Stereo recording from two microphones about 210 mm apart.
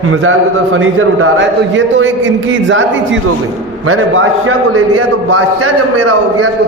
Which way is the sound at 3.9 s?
75° right (ahead or behind).